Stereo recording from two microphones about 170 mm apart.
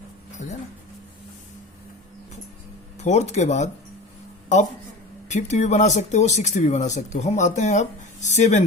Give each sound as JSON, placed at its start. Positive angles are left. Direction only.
{"t": 0.4, "sound": "a sound", "side_deg": 45}
{"t": 3.0, "sound": "speech", "side_deg": 40}
{"t": 5.3, "sound": "speech", "side_deg": 45}